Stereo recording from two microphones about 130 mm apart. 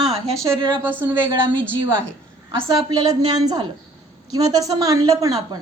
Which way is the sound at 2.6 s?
25° right (ahead or behind).